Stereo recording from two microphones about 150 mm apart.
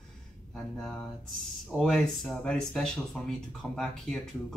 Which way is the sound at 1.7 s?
5° left (ahead or behind).